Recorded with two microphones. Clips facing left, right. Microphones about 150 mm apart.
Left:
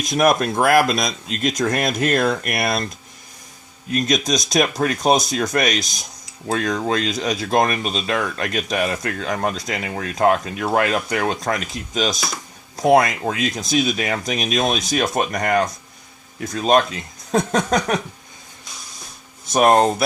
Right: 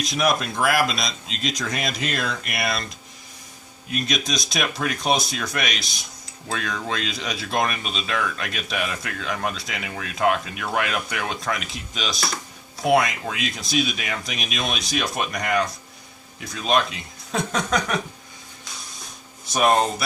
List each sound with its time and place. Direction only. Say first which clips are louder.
0.0 s speech: left 5 dB; 50° left (ahead or behind)
3.9 s speech: left 6 dB; 45° left (ahead or behind)
19.5 s speech: left 5 dB; 45° left (ahead or behind)